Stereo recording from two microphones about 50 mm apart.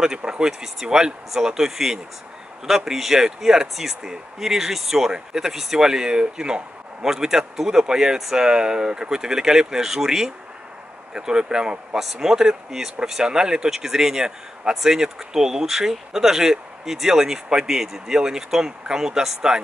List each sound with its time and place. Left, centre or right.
0.0 s speech: centre